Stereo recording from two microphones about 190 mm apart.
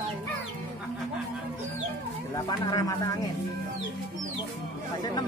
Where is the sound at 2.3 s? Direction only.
20° left (ahead or behind).